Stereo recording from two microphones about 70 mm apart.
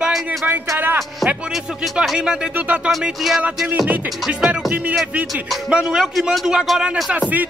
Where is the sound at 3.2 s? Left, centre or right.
Centre.